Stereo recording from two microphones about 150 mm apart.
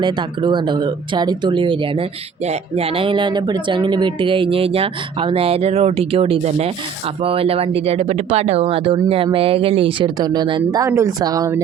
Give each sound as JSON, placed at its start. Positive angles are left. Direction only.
{"t": 0.0, "sound": "speech", "side_deg": -30}